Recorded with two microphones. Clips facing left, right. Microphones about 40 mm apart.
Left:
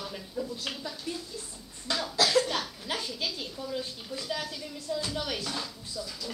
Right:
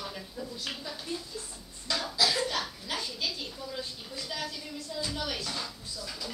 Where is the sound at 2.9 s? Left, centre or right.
Left.